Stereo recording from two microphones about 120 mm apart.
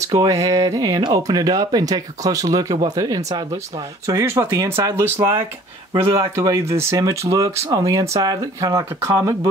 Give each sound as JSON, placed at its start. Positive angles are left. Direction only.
{"t": 0.0, "sound": "speech", "side_deg": -30}